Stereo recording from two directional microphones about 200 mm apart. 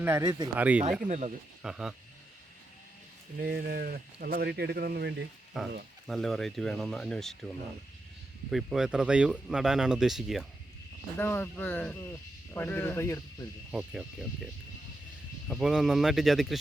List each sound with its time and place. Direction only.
0.0 s speech: 15° right (ahead or behind)
0.5 s speech: 10° right (ahead or behind)
1.0 s speech: 35° right (ahead or behind)
1.6 s speech: 5° right (ahead or behind)
3.4 s speech: 50° right (ahead or behind)
5.5 s speech: centre (ahead or behind)
8.4 s speech: centre (ahead or behind)
11.2 s speech: 10° left (ahead or behind)
13.7 s speech: 5° right (ahead or behind)
15.4 s speech: centre (ahead or behind)